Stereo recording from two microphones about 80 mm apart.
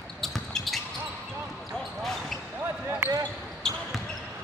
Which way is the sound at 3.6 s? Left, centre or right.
Centre.